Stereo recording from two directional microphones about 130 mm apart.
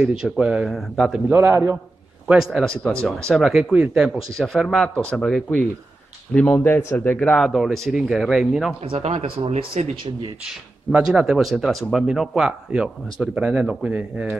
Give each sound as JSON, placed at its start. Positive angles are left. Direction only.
{"t": 0.2, "sound": "a man's voice", "side_deg": -5}
{"t": 1.3, "sound": "a man's voice", "side_deg": -20}
{"t": 2.2, "sound": "a man's voice", "side_deg": -5}
{"t": 8.8, "sound": "speech", "side_deg": -55}
{"t": 10.9, "sound": "a man's voice", "side_deg": -5}